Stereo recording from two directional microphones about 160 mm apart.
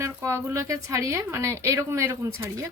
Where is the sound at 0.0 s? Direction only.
20° right (ahead or behind).